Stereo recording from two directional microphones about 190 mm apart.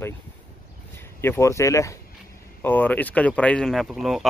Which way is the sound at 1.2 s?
15° left (ahead or behind).